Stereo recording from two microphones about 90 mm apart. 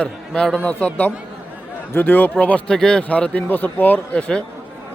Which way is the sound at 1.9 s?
20° left (ahead or behind).